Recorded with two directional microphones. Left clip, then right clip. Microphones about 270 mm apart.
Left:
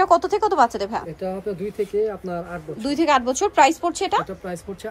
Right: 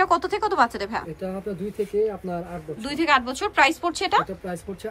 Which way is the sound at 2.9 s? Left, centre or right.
Centre.